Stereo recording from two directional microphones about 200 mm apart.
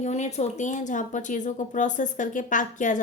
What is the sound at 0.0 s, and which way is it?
A woman's voice, 35° left (ahead or behind).